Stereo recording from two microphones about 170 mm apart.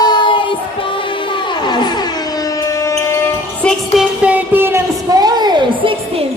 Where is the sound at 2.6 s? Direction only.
20° left (ahead or behind).